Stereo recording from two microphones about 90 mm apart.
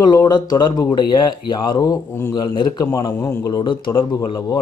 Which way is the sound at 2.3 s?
55° left (ahead or behind).